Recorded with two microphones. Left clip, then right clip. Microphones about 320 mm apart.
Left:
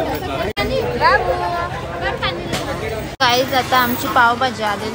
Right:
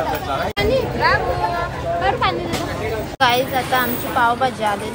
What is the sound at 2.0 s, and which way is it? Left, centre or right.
Music, right.